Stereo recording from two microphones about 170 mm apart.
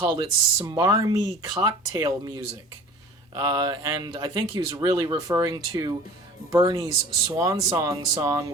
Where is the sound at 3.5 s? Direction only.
25° right (ahead or behind).